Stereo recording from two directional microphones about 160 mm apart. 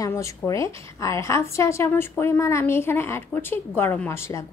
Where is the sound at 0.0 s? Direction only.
20° left (ahead or behind).